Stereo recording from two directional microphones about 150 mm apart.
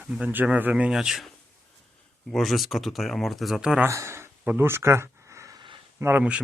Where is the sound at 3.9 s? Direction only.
20° right (ahead or behind).